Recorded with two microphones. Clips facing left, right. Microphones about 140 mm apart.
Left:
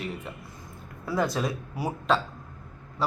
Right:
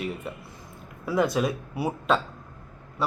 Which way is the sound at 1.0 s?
15° right (ahead or behind).